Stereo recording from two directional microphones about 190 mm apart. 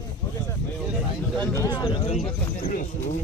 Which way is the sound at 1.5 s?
20° left (ahead or behind).